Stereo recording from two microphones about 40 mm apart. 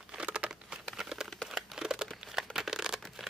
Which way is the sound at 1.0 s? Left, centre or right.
Centre.